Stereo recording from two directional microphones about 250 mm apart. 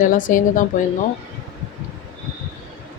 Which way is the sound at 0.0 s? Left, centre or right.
Left.